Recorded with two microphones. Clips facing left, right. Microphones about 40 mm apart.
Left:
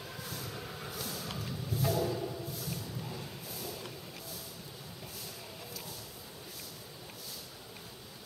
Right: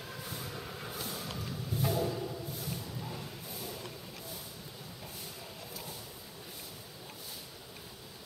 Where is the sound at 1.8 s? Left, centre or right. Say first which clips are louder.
Left 1 dB; centre.